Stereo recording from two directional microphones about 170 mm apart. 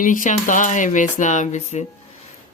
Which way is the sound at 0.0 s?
50° left (ahead or behind).